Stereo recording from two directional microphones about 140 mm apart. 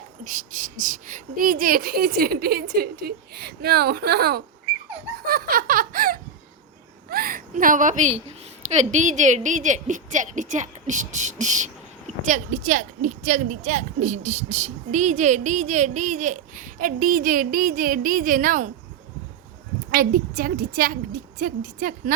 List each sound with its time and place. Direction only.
0.3 s speech: 70° right (ahead or behind); by 4.4 s 90° right
5.2 s giggle: 90° right
7.1 s a woman's voice: 90° right; by 18.7 s 70° right (ahead or behind)
19.9 s speech: 90° right